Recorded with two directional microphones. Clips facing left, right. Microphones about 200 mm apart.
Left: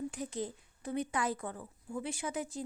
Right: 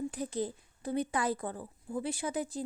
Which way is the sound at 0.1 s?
35° right (ahead or behind).